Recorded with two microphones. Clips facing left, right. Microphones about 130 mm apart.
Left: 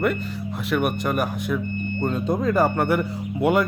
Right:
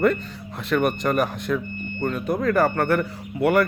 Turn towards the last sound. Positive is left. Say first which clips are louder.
# right 1 dB
turn(degrees=15)  # may be behind; listen again after turning